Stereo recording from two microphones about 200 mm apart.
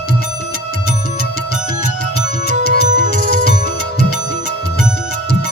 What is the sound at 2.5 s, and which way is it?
Music, 40° right (ahead or behind).